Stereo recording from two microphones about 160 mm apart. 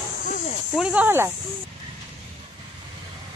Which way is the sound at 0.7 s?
10° right (ahead or behind).